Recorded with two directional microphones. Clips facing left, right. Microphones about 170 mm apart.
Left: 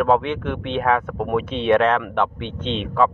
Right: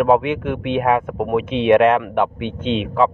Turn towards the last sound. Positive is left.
turn(degrees=-10)  # may be behind; listen again after turning